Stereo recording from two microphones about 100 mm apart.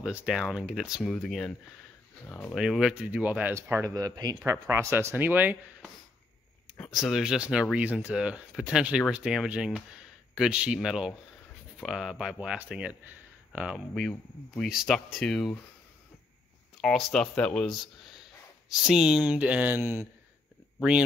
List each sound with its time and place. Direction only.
0.0 s speech: 5° right (ahead or behind)
2.2 s speech: 20° left (ahead or behind)
2.5 s speech: centre (ahead or behind)
2.9 s speech: 15° right (ahead or behind)
3.7 s speech: 35° right (ahead or behind)
4.5 s speech: 25° right (ahead or behind)
6.9 s speech: 5° right (ahead or behind)
15.1 s speech: 5° left (ahead or behind)
16.8 s speech: 5° left (ahead or behind)
18.7 s speech: 5° right (ahead or behind); by 20.1 s 20° right (ahead or behind)